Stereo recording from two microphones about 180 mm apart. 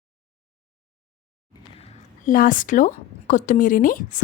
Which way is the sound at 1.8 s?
40° left (ahead or behind).